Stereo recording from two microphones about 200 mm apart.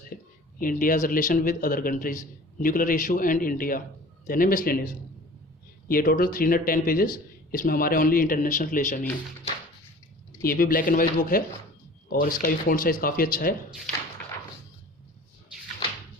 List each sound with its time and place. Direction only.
0.6 s a man's voice: 45° left (ahead or behind)
5.9 s a man's voice: 45° left (ahead or behind)
10.4 s a man's voice: 45° left (ahead or behind)